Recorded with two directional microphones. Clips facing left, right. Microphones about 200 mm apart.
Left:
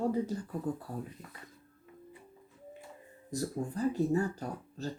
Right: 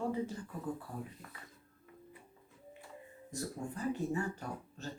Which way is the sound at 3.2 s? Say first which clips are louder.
Left 6 dB; 35° left (ahead or behind).